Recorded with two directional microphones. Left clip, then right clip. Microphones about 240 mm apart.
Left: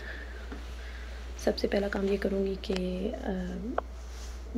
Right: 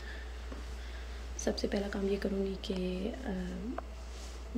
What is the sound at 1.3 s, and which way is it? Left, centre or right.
A woman's voice, centre.